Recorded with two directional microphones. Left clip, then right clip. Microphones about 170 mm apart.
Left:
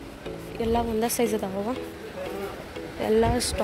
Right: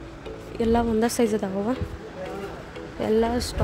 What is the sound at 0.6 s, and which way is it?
A woman's voice, 35° right (ahead or behind).